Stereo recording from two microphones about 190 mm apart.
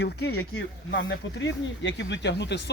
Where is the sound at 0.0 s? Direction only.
60° left (ahead or behind).